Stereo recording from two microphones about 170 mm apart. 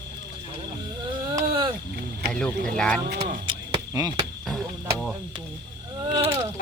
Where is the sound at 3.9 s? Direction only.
20° right (ahead or behind).